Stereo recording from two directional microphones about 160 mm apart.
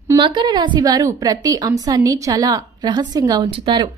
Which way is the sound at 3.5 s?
35° right (ahead or behind).